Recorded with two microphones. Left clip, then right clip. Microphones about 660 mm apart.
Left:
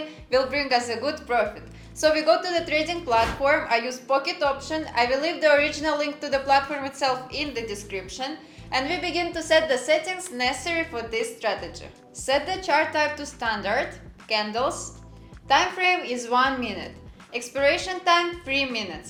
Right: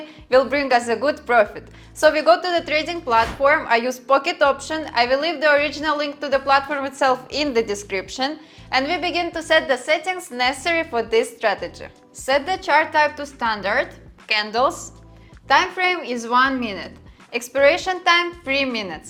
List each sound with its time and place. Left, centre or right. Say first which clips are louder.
0.3 s a woman's voice: right 6 dB; right
8.7 s a woman's voice: right 5 dB; right
17.3 s a woman's voice: right 6 dB; right